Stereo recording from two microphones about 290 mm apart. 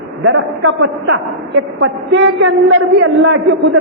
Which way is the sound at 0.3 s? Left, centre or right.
Right.